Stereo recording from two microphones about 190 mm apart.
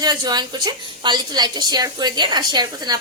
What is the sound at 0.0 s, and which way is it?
A woman's voice, 20° right (ahead or behind).